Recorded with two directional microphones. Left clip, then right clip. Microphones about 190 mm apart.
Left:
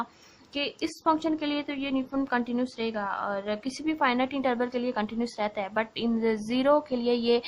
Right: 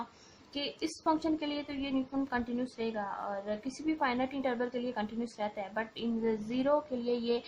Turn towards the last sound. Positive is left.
turn(degrees=25)  # may be behind; listen again after turning